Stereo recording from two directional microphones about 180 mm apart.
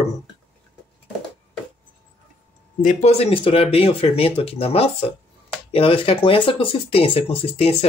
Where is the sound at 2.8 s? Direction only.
45° left (ahead or behind).